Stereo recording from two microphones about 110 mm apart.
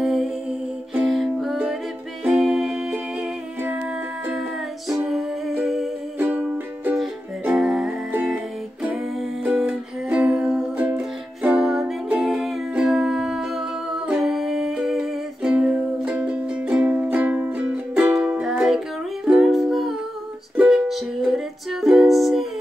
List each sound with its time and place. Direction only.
0.0 s music: 5° right (ahead or behind)
4.3 s music: 5° right (ahead or behind)
6.1 s music: 20° right (ahead or behind)
7.5 s music: 5° right (ahead or behind)